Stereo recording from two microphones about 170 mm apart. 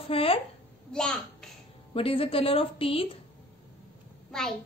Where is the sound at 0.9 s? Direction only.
5° left (ahead or behind).